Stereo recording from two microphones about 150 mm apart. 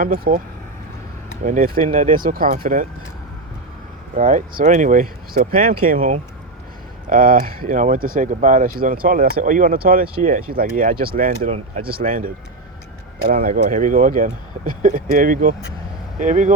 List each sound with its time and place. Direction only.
0.0 s speech: 65° right (ahead or behind)
1.5 s speech: 65° right (ahead or behind)
4.2 s speech: 60° right (ahead or behind)
11.9 s speech: 75° right (ahead or behind)
13.3 s speech: 65° right (ahead or behind)